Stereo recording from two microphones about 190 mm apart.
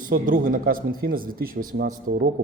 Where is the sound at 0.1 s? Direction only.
45° right (ahead or behind).